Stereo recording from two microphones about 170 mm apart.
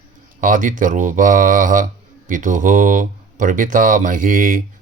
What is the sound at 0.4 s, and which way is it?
Speech, 50° right (ahead or behind).